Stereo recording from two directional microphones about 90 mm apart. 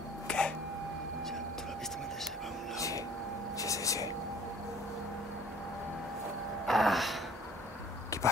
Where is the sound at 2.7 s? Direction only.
35° left (ahead or behind).